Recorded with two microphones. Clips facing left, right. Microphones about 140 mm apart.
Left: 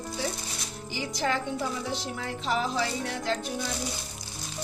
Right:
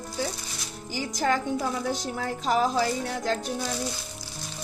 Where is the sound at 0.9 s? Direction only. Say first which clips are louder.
Right 3 dB; 45° right (ahead or behind).